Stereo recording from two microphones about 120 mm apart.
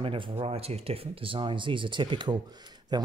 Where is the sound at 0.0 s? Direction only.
50° right (ahead or behind).